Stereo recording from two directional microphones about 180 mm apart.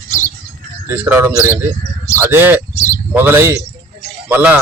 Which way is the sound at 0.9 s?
10° right (ahead or behind).